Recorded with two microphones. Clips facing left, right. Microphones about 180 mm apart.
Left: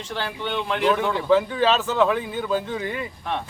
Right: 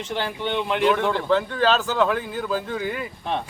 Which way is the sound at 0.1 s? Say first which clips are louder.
Right 2 dB; 20° right (ahead or behind).